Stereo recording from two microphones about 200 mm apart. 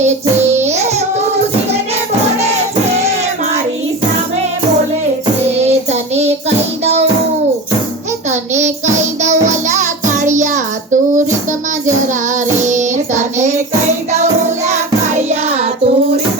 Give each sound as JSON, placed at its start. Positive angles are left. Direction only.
{"t": 0.0, "sound": "child singing", "side_deg": -35}
{"t": 5.5, "sound": "child singing", "side_deg": -30}
{"t": 8.6, "sound": "music", "side_deg": -35}
{"t": 12.6, "sound": "child singing", "side_deg": -35}
{"t": 14.7, "sound": "music", "side_deg": -35}